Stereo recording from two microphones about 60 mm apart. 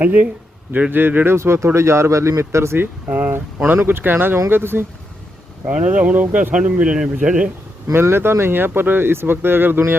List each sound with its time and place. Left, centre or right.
0.0 s speech: right
2.7 s speech: right
5.6 s speech: right
7.9 s speech: right